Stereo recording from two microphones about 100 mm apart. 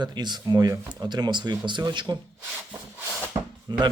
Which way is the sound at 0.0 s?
45° right (ahead or behind).